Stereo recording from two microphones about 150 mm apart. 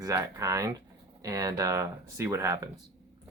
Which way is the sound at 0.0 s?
20° right (ahead or behind).